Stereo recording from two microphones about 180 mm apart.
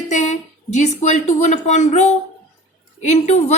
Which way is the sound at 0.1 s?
40° left (ahead or behind).